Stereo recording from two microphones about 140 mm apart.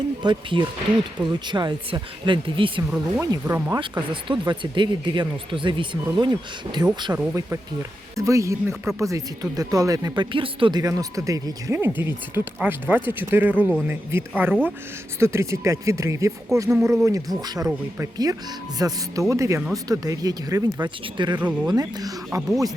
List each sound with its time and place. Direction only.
0.2 s speech: 35° right (ahead or behind)
3.2 s speech: 20° right (ahead or behind)
4.1 s speech: 35° right (ahead or behind)
7.1 s speech: 20° right (ahead or behind)
21.3 s speech: 10° right (ahead or behind)
21.7 s speech: 30° right (ahead or behind)
22.4 s speech: centre (ahead or behind)